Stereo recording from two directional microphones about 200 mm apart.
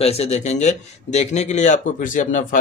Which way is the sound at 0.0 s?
30° left (ahead or behind).